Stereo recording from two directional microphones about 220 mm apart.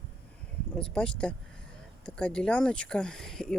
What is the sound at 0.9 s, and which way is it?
Speech, 5° left (ahead or behind).